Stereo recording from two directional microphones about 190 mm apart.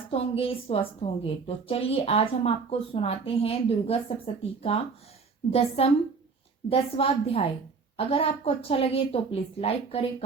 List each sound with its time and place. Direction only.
0.1 s a woman's voice: 30° left (ahead or behind)